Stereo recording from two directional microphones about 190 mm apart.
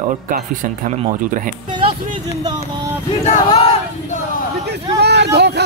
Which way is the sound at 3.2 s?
30° left (ahead or behind).